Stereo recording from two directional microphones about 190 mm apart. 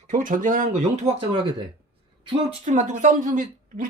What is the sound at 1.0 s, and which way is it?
Speech, 25° right (ahead or behind).